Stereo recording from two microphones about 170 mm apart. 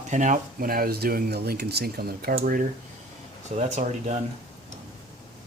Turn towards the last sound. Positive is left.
turn(degrees=-45)  # may be behind; listen again after turning